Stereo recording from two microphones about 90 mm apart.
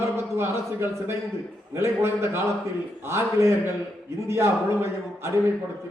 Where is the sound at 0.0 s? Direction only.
30° right (ahead or behind).